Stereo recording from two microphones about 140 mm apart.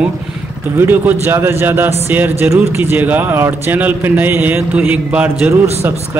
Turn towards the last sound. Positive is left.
turn(degrees=-10)  # may be behind; listen again after turning